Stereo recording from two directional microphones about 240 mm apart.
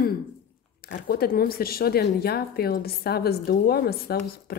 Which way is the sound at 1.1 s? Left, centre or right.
Left.